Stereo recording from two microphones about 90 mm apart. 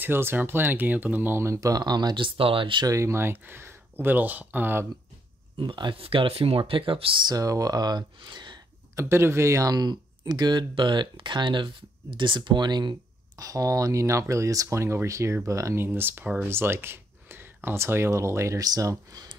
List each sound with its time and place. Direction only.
0.0 s speech: 25° right (ahead or behind); by 2.9 s 65° right (ahead or behind)
2.9 s speech: 30° right (ahead or behind)
5.6 s speech: 60° right (ahead or behind); by 6.6 s 90° right
6.6 s speech: 75° right (ahead or behind)
7.2 s speech: 40° right (ahead or behind); by 8.5 s 60° right (ahead or behind)
8.9 s speech: 30° right (ahead or behind); by 10.7 s 50° right (ahead or behind)
10.7 s speech: 60° right (ahead or behind)
13.4 s speech: 40° right (ahead or behind)
15.8 s speech: 25° right (ahead or behind); by 19.2 s 40° right (ahead or behind)